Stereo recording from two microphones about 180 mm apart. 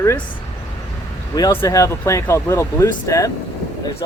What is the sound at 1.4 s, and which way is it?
Speech, 20° left (ahead or behind).